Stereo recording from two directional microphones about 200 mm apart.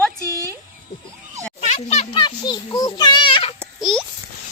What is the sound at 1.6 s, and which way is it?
Children playing, 35° left (ahead or behind).